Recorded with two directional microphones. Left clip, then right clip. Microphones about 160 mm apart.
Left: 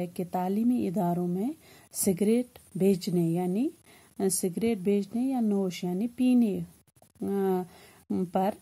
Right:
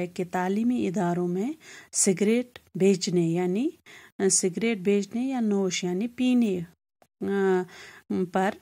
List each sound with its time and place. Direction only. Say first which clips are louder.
0.0 s speech: right 3 dB; 15° right (ahead or behind)